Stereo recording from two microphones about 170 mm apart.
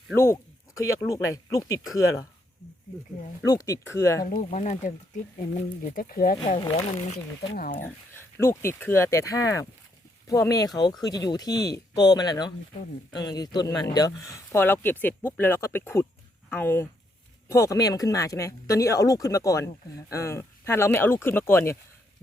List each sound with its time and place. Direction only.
0.2 s speech: 15° left (ahead or behind)
3.4 s speech: 20° left (ahead or behind)
4.3 s speech: 50° left (ahead or behind)
6.6 s speech: 40° left (ahead or behind)
7.5 s speech: 55° left (ahead or behind)
7.8 s speech: 15° left (ahead or behind)